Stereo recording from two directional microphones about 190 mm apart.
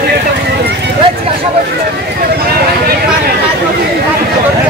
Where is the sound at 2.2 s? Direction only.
55° right (ahead or behind).